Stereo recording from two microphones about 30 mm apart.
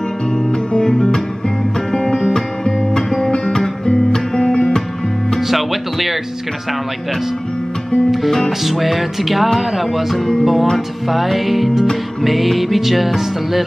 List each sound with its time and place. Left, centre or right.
0.5 s music: left
5.5 s music: centre
8.5 s music: centre